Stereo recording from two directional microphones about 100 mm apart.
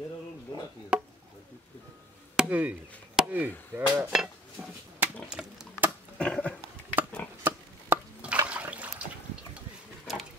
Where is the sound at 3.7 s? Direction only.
20° right (ahead or behind).